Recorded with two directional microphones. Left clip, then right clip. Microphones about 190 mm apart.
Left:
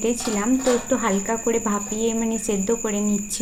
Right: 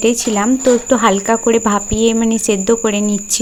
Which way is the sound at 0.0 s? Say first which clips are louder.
Right 9 dB; 40° right (ahead or behind).